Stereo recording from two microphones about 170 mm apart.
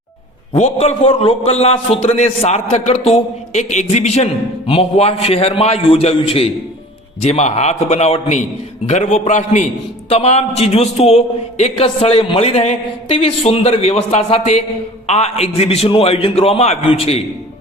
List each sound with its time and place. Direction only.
0.5 s a man's voice: 40° left (ahead or behind)